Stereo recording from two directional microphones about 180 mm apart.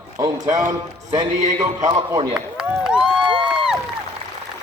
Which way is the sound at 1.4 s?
40° right (ahead or behind).